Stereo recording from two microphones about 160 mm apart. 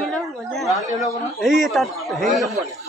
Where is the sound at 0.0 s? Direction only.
Centre (ahead or behind).